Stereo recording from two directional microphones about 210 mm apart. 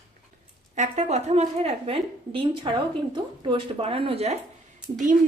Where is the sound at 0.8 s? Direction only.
30° right (ahead or behind).